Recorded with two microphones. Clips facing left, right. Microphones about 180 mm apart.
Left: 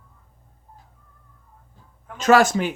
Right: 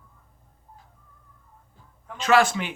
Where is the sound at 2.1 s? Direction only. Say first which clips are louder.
Left 4 dB; 45° left (ahead or behind).